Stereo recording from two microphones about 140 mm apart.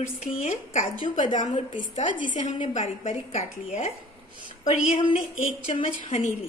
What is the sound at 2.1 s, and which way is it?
A woman's voice, 65° left (ahead or behind).